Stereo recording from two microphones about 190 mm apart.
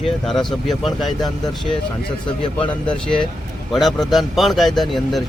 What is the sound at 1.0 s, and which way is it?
Speech, 20° left (ahead or behind).